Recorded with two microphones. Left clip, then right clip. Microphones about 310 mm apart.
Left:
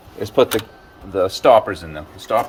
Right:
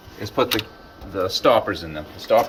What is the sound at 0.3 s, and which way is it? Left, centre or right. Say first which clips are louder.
Speech: left 5 dB; left.